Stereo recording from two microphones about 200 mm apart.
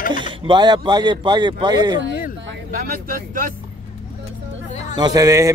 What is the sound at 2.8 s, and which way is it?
Speech, 45° right (ahead or behind).